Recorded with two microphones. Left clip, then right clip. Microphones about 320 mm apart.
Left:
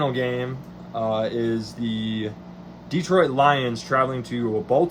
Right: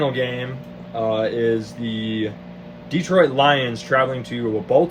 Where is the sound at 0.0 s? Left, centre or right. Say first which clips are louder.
Right 2 dB; centre.